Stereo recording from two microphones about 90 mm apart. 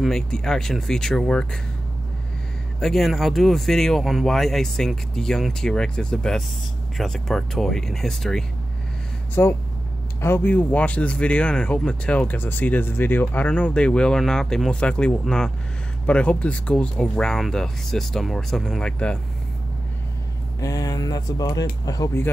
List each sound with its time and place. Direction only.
0.0 s speech: 5° left (ahead or behind)
2.8 s speech: centre (ahead or behind)
9.3 s speech: 25° left (ahead or behind)
20.6 s speech: 40° left (ahead or behind)